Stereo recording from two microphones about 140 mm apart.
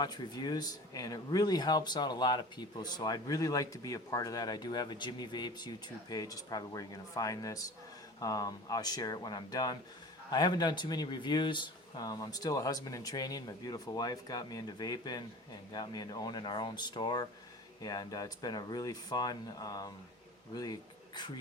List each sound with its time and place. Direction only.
0.0 s speech: 30° left (ahead or behind)